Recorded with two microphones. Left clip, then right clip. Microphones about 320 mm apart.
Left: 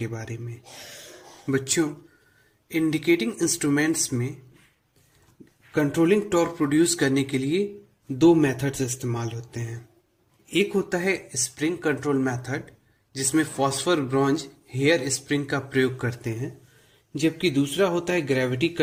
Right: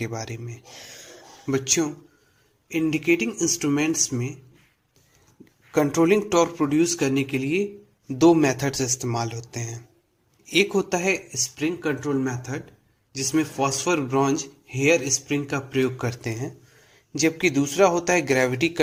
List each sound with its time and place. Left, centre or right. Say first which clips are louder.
0.0 s speech: right 3 dB; centre
5.7 s speech: right 2 dB; centre